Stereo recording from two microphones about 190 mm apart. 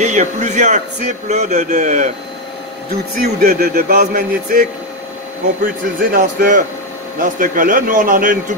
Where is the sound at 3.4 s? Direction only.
50° right (ahead or behind).